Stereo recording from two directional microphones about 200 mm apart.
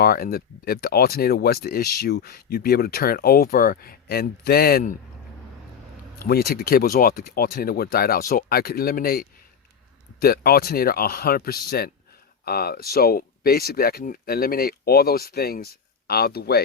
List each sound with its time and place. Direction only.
0.0 s speech: 50° left (ahead or behind)
6.1 s speech: 50° left (ahead or behind)